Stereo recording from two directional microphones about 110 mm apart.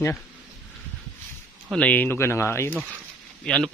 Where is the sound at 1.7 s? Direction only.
10° left (ahead or behind).